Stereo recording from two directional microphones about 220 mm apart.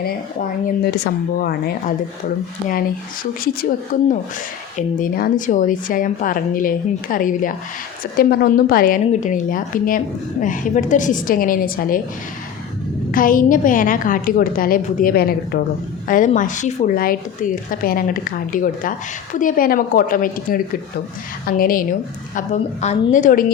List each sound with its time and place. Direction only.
0.9 s speech: 45° left (ahead or behind)
3.9 s speech: 35° left (ahead or behind)
13.1 s speech: 40° left (ahead or behind)